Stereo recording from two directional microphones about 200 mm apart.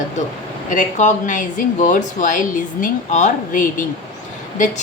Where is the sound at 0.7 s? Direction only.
40° left (ahead or behind).